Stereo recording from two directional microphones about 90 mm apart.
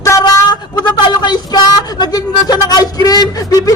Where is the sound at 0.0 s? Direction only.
35° left (ahead or behind).